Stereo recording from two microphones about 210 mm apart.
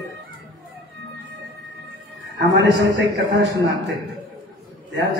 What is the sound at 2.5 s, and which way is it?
Speech, 55° right (ahead or behind).